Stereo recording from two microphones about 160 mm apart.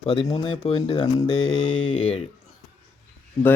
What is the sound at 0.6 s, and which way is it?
Speech, 35° left (ahead or behind).